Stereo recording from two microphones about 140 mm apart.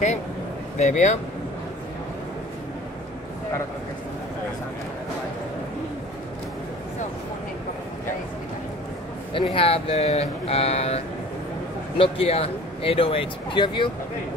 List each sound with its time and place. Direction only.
0.7 s speech: 60° left (ahead or behind)
9.3 s speech: 40° left (ahead or behind)
12.0 s speech: 45° left (ahead or behind)